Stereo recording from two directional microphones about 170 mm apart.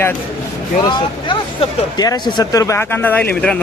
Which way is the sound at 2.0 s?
25° left (ahead or behind).